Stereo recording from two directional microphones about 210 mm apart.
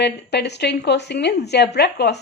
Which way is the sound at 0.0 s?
50° left (ahead or behind).